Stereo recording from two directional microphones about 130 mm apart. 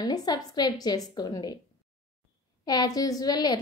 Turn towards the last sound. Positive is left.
turn(degrees=30)  # may be behind; listen again after turning